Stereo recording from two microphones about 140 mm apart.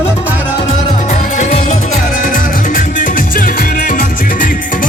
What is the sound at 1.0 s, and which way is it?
Music, 65° left (ahead or behind).